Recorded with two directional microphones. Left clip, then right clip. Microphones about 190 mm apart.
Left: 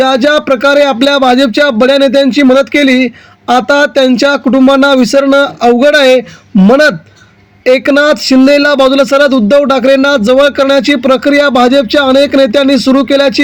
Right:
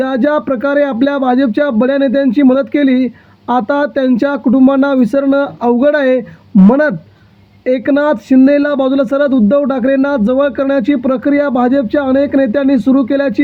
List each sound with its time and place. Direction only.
0.0 s speech: 30° left (ahead or behind)
7.6 s speech: 35° left (ahead or behind)